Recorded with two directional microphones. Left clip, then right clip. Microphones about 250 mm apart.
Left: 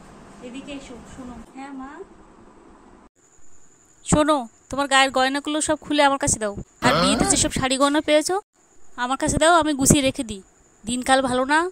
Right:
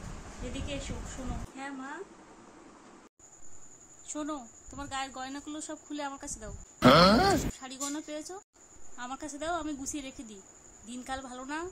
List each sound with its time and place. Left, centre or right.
1.6 s a woman's voice: centre
4.0 s speech: left
6.8 s speech: centre
7.5 s speech: left